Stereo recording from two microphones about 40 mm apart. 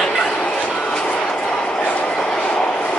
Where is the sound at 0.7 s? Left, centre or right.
Centre.